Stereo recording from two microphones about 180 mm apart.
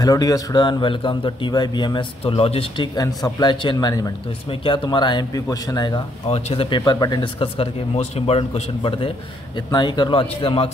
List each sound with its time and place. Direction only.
0.0 s a man's voice: 20° left (ahead or behind)
3.0 s a man's voice: 20° left (ahead or behind)